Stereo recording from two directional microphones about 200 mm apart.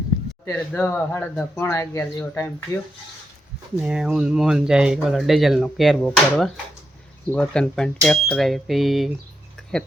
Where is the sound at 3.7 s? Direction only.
5° right (ahead or behind).